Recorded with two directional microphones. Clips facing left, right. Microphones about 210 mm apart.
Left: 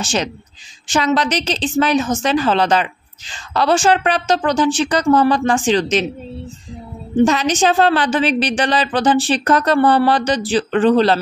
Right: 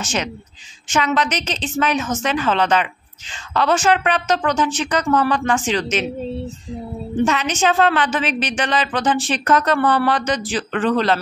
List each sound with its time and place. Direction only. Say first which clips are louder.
0.0 s a woman's voice: left 3 dB; 30° left (ahead or behind)
7.2 s a woman's voice: left 1 dB; 35° left (ahead or behind)